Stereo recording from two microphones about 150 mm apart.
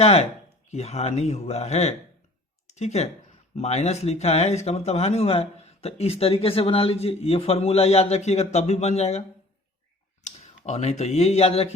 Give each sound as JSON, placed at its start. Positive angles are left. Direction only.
{"t": 0.0, "sound": "speech", "side_deg": 45}
{"t": 10.2, "sound": "speech", "side_deg": 50}